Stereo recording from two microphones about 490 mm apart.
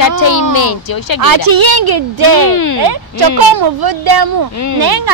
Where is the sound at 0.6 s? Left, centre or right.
Left.